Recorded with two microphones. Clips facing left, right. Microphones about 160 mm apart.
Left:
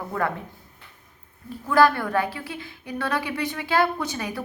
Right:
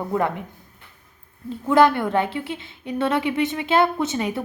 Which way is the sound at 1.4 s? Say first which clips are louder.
Right 3 dB; 20° right (ahead or behind).